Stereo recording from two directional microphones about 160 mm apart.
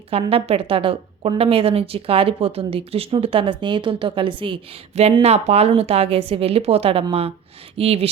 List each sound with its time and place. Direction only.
0.1 s a woman's voice: 35° right (ahead or behind)